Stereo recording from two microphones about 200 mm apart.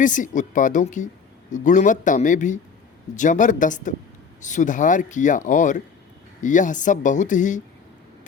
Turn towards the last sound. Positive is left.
turn(degrees=40)  # may be behind; listen again after turning